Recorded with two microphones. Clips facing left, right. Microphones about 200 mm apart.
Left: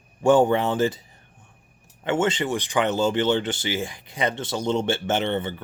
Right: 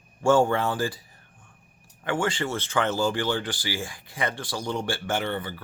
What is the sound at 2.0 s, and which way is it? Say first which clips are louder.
Speech: left 4 dB; 20° left (ahead or behind).